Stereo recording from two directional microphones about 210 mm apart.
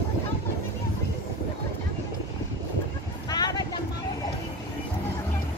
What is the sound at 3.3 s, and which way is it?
Music, 20° left (ahead or behind).